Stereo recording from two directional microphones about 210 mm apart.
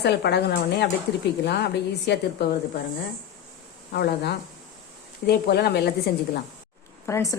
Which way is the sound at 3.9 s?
50° left (ahead or behind).